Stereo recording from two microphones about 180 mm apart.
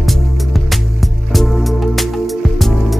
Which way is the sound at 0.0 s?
Centre (ahead or behind).